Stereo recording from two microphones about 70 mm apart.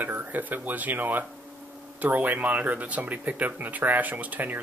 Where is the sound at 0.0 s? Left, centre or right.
Right.